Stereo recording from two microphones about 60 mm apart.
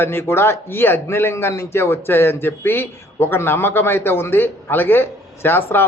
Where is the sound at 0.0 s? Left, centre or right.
Left.